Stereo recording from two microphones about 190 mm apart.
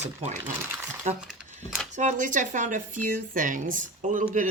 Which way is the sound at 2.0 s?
40° right (ahead or behind).